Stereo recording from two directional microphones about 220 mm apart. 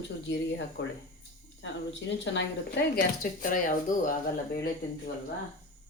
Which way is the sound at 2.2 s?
50° left (ahead or behind).